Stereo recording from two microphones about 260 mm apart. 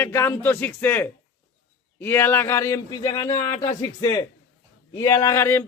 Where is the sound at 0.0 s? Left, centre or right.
Centre.